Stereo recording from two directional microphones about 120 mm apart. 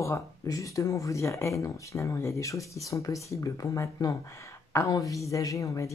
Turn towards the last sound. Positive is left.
turn(degrees=25)  # may be behind; listen again after turning